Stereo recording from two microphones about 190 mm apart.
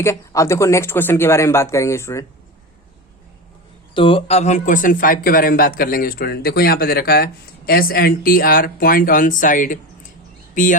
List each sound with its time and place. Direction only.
0.0 s speech: 15° left (ahead or behind)
3.9 s speech: 25° left (ahead or behind); by 10.8 s 45° left (ahead or behind)